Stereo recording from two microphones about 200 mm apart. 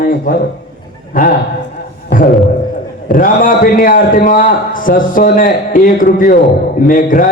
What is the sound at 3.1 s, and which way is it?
Speech, 45° left (ahead or behind).